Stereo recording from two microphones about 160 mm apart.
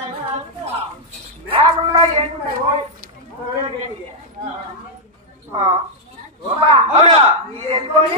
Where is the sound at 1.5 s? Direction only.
35° right (ahead or behind).